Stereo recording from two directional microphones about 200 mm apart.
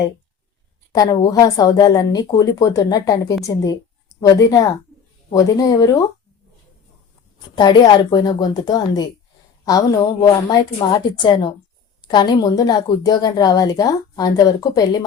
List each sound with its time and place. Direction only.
0.9 s a woman's voice: 20° left (ahead or behind)
7.5 s a woman's voice: 20° left (ahead or behind)